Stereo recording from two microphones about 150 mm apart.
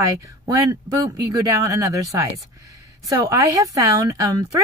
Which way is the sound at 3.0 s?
20° right (ahead or behind).